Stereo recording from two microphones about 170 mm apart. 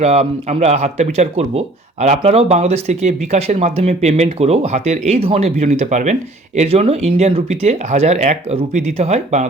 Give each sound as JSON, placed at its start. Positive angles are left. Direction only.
{"t": 0.0, "sound": "speech", "side_deg": -40}